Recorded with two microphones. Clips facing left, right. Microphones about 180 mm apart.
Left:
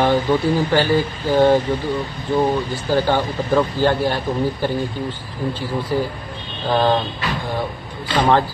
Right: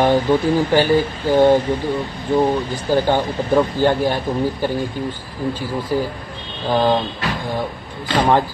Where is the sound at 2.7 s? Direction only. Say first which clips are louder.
Right 1 dB; 15° right (ahead or behind).